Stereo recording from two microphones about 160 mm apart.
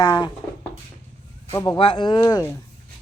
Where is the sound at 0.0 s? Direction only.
25° left (ahead or behind).